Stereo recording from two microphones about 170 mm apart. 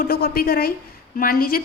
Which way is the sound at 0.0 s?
60° left (ahead or behind).